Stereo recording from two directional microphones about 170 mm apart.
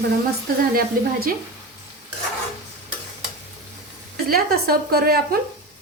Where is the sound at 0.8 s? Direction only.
60° right (ahead or behind).